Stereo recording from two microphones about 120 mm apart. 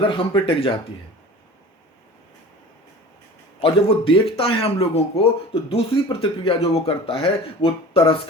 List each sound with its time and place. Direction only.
0.0 s speech: 45° left (ahead or behind)
3.6 s speech: 50° left (ahead or behind)